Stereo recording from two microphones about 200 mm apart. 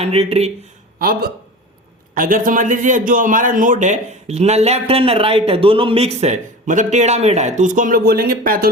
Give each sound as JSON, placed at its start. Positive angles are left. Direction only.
{"t": 0.0, "sound": "a man's voice", "side_deg": -30}
{"t": 0.9, "sound": "a man's voice", "side_deg": -45}